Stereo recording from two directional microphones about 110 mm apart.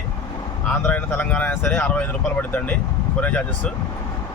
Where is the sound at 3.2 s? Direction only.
15° left (ahead or behind).